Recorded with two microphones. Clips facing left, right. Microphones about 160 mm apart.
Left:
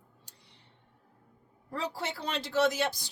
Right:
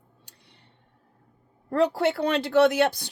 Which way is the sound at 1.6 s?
60° right (ahead or behind).